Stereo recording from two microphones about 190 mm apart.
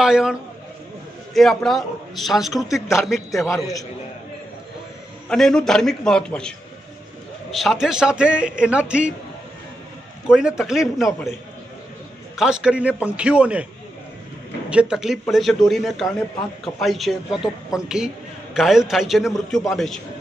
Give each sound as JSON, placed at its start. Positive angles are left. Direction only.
{"t": 0.0, "sound": "a man's voice", "side_deg": -5}
{"t": 3.4, "sound": "a man's voice", "side_deg": 15}
{"t": 5.3, "sound": "a man's voice", "side_deg": 5}
{"t": 7.5, "sound": "a man's voice", "side_deg": 0}
{"t": 10.2, "sound": "a man's voice", "side_deg": -5}
{"t": 12.4, "sound": "a man's voice", "side_deg": -5}
{"t": 14.7, "sound": "a man's voice", "side_deg": -5}